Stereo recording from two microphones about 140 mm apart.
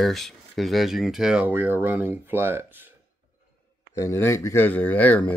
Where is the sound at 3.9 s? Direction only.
20° left (ahead or behind).